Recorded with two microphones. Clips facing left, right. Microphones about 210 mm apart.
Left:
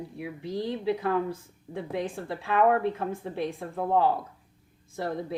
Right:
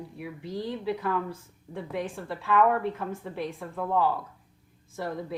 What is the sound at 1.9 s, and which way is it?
A woman's voice, 35° left (ahead or behind).